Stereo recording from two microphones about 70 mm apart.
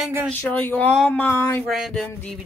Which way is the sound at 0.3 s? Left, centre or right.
Left.